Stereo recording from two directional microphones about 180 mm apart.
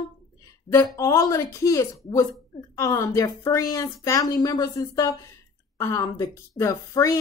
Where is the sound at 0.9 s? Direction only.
15° left (ahead or behind).